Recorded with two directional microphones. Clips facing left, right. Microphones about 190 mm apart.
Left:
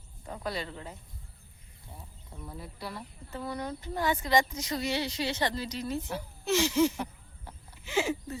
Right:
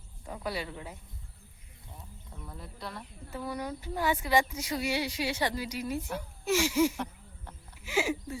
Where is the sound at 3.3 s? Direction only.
10° right (ahead or behind).